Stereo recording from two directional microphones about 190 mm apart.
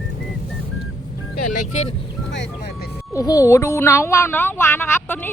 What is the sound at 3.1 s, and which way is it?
Speech, 20° left (ahead or behind).